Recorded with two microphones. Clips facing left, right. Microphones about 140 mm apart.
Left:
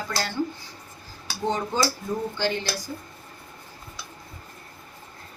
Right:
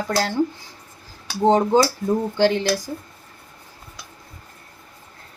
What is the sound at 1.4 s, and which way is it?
Speech, 90° right.